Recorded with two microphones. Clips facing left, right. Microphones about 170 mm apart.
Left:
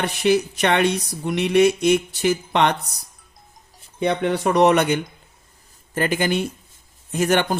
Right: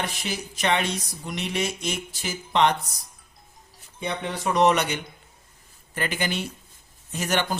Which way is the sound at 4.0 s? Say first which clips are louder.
Left 9 dB; 65° left (ahead or behind).